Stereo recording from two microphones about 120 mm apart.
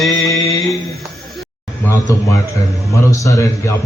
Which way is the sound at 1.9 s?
25° left (ahead or behind).